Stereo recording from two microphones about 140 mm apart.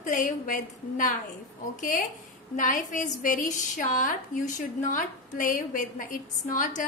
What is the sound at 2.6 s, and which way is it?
A woman's voice, 65° left (ahead or behind).